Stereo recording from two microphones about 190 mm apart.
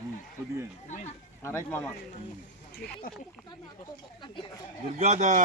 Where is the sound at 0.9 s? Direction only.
40° left (ahead or behind).